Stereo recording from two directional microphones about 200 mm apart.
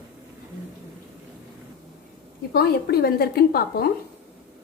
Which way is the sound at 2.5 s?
50° left (ahead or behind).